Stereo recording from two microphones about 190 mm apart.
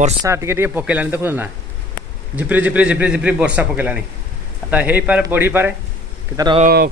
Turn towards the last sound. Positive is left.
turn(degrees=-55)  # may be behind; listen again after turning